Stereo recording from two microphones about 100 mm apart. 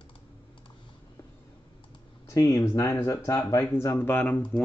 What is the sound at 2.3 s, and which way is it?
Speech, 35° left (ahead or behind).